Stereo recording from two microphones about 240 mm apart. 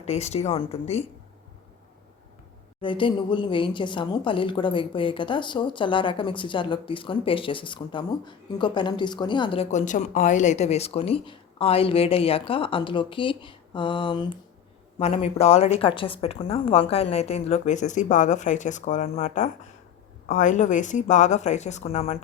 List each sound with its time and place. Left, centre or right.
0.0 s a woman's voice: left
2.8 s a woman's voice: left